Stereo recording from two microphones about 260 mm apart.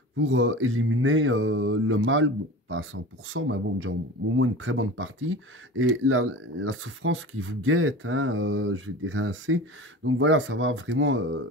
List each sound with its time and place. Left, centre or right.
0.3 s mantra: right